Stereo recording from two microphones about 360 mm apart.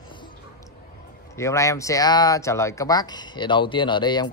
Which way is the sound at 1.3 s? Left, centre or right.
Centre.